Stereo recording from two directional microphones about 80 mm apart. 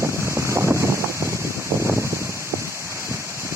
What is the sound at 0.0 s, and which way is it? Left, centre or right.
Boat, right.